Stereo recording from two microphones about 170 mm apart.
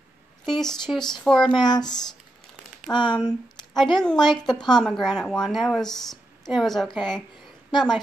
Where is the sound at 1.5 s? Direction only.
25° left (ahead or behind).